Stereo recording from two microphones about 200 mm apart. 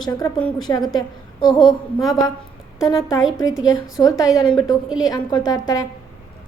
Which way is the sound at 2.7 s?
15° left (ahead or behind).